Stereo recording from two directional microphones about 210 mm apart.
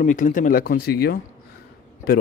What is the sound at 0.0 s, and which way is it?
Speech, 35° left (ahead or behind).